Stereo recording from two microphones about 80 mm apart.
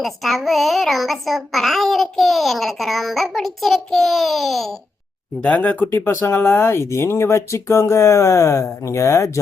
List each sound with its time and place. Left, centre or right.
0.0 s a child's voice: centre
5.4 s speech: centre
5.8 s speech: left